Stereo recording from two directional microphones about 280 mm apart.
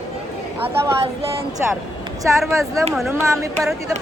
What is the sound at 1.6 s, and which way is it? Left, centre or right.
Speech, centre.